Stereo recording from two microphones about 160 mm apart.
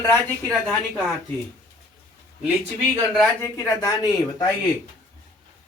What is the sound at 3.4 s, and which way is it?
Speech, 20° left (ahead or behind).